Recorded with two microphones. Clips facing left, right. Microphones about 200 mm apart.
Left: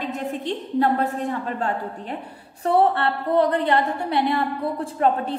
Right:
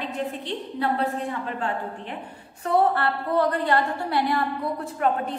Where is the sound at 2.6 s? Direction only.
30° left (ahead or behind).